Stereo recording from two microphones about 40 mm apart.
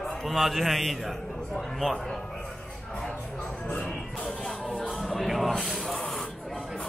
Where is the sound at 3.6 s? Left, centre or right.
Left.